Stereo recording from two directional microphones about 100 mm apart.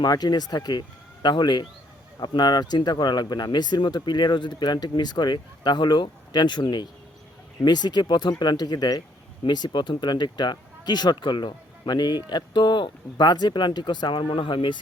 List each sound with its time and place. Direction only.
0.0 s speech: 45° left (ahead or behind)